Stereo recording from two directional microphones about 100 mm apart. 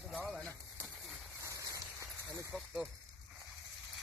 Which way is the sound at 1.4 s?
35° right (ahead or behind).